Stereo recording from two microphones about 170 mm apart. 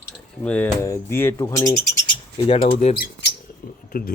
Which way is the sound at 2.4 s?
35° left (ahead or behind).